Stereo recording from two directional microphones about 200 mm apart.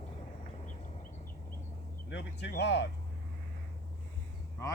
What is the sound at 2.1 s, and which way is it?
Speech, 60° left (ahead or behind).